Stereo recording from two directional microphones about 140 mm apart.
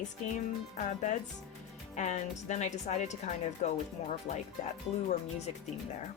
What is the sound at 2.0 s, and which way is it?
Speech, 60° left (ahead or behind).